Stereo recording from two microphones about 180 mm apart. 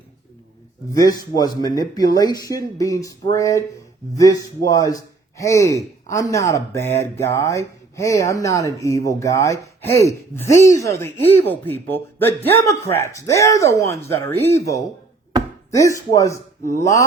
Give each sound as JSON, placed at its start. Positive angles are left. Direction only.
{"t": 0.9, "sound": "speech", "side_deg": 20}
{"t": 15.7, "sound": "speech", "side_deg": 15}